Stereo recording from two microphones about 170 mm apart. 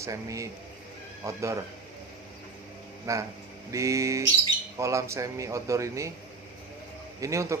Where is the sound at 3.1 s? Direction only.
15° right (ahead or behind).